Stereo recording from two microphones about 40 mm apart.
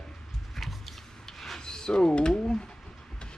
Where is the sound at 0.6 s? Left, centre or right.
Centre.